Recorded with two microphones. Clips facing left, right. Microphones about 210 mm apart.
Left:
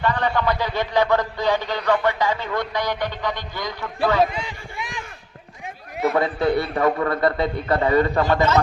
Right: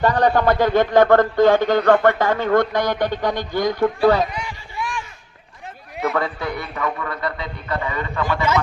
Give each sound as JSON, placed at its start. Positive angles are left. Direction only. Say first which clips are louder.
{"t": 0.0, "sound": "a man's voice", "louder": "right 5 dB", "side_deg": -40}
{"t": 4.4, "sound": "a sound", "louder": "right 2 dB", "side_deg": 20}
{"t": 6.1, "sound": "a man's voice", "louder": "left 4 dB", "side_deg": 30}